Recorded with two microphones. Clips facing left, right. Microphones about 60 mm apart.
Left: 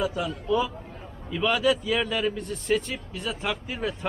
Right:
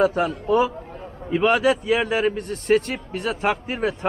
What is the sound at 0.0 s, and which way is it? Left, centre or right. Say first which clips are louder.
A man's voice: right 8 dB; right.